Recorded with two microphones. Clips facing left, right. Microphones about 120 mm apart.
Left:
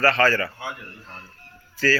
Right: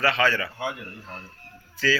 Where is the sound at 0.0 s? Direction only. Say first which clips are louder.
Left 3 dB; centre (ahead or behind).